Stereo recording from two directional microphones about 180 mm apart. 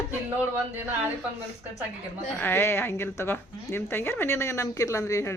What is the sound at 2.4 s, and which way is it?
A woman's voice, 15° left (ahead or behind).